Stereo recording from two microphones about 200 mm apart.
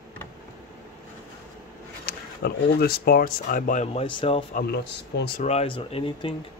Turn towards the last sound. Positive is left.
turn(degrees=25)  # may be behind; listen again after turning